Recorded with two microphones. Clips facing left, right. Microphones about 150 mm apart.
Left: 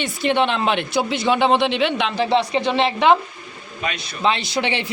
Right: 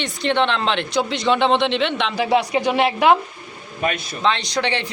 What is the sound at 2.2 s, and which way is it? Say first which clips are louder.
Speech: right 1 dB; 10° right (ahead or behind).